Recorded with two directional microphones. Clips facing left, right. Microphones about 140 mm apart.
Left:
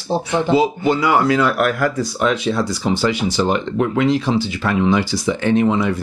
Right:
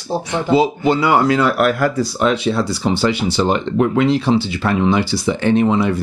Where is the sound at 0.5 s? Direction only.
25° right (ahead or behind).